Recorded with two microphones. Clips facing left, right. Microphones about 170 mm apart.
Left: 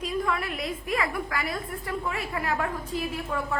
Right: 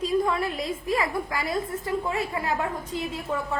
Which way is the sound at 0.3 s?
30° right (ahead or behind).